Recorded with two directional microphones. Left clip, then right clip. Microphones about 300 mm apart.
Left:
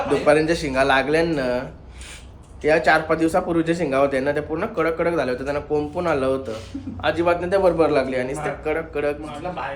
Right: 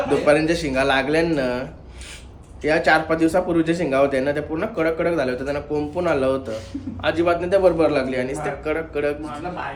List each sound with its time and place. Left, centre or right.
0.0 s speech: centre
2.6 s speech: centre